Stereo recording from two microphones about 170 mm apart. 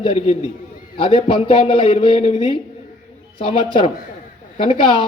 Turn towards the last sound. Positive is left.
turn(degrees=35)  # may be behind; listen again after turning